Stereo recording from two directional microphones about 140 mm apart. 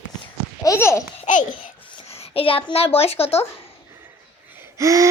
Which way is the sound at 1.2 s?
65° left (ahead or behind).